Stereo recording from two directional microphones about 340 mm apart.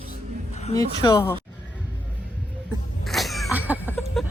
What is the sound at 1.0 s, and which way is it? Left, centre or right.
Speech, centre.